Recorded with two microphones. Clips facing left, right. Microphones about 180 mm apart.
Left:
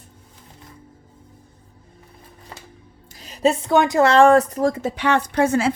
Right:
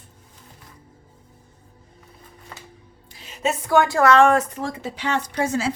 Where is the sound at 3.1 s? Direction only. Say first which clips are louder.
Left 6 dB; 40° left (ahead or behind).